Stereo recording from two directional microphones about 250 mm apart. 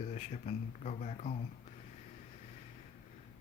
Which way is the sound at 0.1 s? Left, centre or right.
Left.